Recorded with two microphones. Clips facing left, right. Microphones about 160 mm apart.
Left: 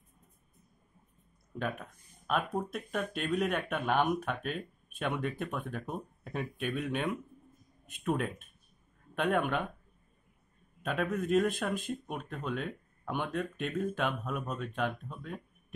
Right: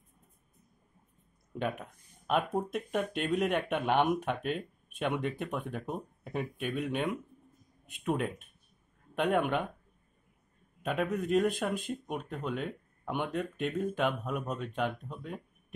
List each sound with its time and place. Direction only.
1.6 s speech: 20° right (ahead or behind)
10.8 s speech: 15° right (ahead or behind)